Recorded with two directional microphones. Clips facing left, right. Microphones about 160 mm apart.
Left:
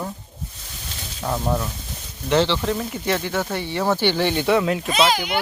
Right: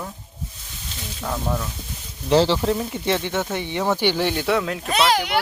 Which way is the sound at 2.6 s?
25° right (ahead or behind).